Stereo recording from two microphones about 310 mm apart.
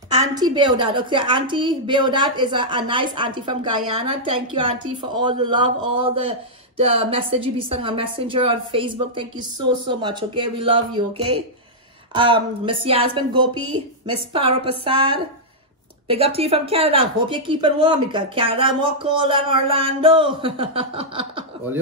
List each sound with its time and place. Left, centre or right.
0.1 s a woman's voice: centre